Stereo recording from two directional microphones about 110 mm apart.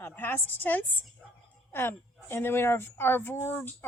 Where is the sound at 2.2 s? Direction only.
20° left (ahead or behind).